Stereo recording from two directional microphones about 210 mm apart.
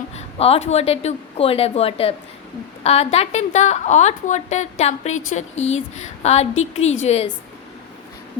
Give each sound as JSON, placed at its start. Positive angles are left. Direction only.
{"t": 0.2, "sound": "a woman's voice", "side_deg": 30}